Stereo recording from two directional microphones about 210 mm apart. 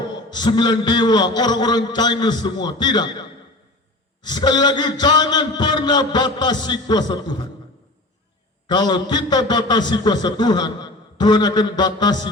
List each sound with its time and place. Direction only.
0.3 s a man's voice: 20° left (ahead or behind)
8.6 s a man's voice: 20° left (ahead or behind)